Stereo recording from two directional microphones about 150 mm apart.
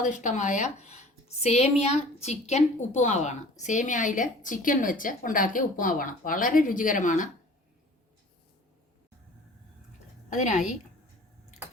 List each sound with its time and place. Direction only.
0.0 s a woman's voice: 55° left (ahead or behind)
10.2 s a woman's voice: 55° left (ahead or behind)